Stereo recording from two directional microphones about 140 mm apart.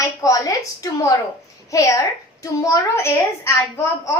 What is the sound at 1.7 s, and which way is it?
A woman's voice, 25° left (ahead or behind).